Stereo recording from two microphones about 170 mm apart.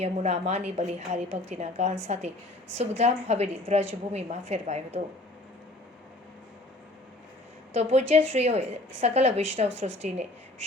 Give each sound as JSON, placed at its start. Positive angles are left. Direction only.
{"t": 0.0, "sound": "a woman's voice", "side_deg": -40}
{"t": 7.7, "sound": "a woman's voice", "side_deg": -40}